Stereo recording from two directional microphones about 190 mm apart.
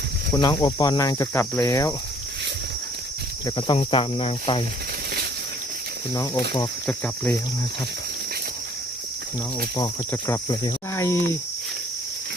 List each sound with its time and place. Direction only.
0.3 s speech: 20° left (ahead or behind)
3.8 s speech: 30° left (ahead or behind)
6.8 s speech: 10° left (ahead or behind)
9.7 s speech: 15° left (ahead or behind)